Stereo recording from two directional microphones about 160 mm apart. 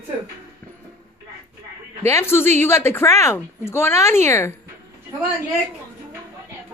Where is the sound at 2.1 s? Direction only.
15° left (ahead or behind).